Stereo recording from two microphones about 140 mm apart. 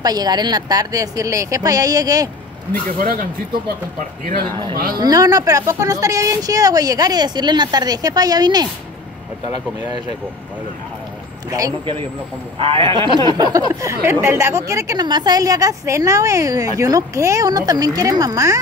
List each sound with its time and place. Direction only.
0.0 s a woman's voice: 30° right (ahead or behind)
3.0 s speech: 75° right (ahead or behind)
4.7 s speech: 90° right
5.0 s a woman's voice: 25° right (ahead or behind)
11.8 s a woman's voice: 40° right (ahead or behind); by 18.6 s 25° right (ahead or behind)